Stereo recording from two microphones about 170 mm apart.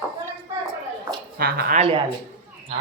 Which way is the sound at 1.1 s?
15° right (ahead or behind).